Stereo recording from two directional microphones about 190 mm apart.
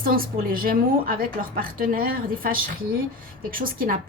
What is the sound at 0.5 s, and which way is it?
A woman's voice, 50° right (ahead or behind).